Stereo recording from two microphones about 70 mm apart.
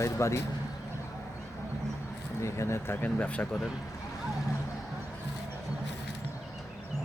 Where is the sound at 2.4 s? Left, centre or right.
Left.